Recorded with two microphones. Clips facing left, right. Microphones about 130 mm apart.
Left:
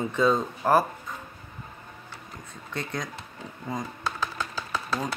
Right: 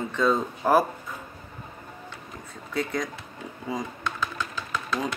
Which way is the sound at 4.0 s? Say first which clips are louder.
Even; 35° left (ahead or behind).